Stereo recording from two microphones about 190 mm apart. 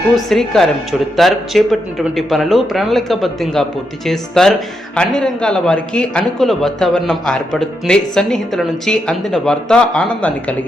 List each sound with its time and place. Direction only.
0.3 s a man's voice: centre (ahead or behind)